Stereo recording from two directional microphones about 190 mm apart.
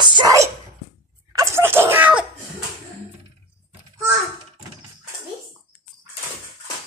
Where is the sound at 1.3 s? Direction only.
15° right (ahead or behind).